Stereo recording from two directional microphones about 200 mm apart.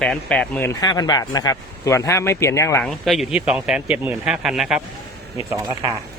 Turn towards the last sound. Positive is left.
turn(degrees=-20)  # may be behind; listen again after turning